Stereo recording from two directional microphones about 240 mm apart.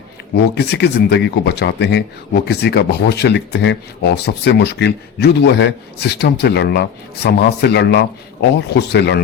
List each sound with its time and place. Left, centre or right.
0.5 s speech: left